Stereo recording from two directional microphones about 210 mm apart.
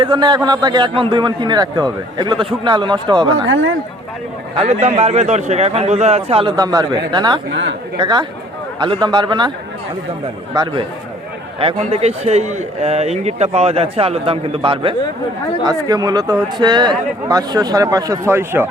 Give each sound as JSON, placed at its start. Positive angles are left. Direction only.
{"t": 0.0, "sound": "a man's voice", "side_deg": -20}
{"t": 3.4, "sound": "speech", "side_deg": -65}
{"t": 4.5, "sound": "a man's voice", "side_deg": -30}
{"t": 7.5, "sound": "speech", "side_deg": -60}
{"t": 7.9, "sound": "a man's voice", "side_deg": -20}
{"t": 10.5, "sound": "a man's voice", "side_deg": -20}